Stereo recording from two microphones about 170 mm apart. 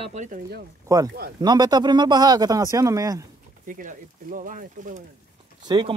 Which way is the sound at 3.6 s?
50° right (ahead or behind).